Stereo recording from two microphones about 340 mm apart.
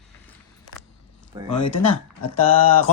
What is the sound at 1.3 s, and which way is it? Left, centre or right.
Speech, centre.